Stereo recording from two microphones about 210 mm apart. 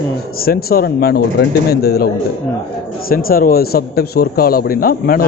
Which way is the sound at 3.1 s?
45° left (ahead or behind).